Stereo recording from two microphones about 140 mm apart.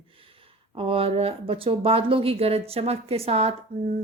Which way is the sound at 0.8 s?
40° right (ahead or behind).